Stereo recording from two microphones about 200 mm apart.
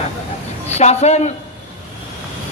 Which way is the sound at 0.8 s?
35° left (ahead or behind).